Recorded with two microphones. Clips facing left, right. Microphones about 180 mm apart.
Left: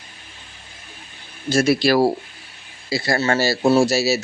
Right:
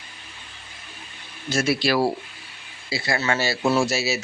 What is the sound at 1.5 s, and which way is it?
Speech, 40° left (ahead or behind).